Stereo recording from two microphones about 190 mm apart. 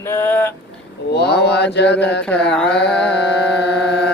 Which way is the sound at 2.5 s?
5° left (ahead or behind).